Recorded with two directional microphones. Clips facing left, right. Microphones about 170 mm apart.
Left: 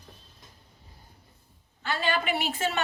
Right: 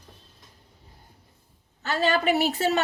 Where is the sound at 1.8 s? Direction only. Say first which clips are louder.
Right 5 dB; 40° right (ahead or behind).